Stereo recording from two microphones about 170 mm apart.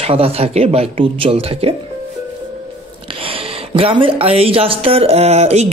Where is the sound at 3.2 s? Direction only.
35° right (ahead or behind).